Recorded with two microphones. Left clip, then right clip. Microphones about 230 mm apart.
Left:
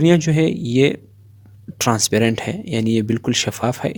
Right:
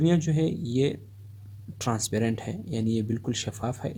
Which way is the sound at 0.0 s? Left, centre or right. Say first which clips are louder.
Left 10 dB; left.